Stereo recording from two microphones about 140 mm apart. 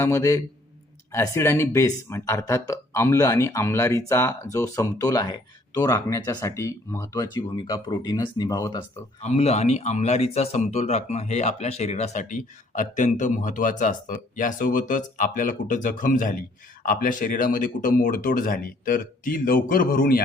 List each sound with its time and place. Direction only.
0.0 s speech: 20° left (ahead or behind)
9.2 s speech: 50° left (ahead or behind); by 20.2 s 90° left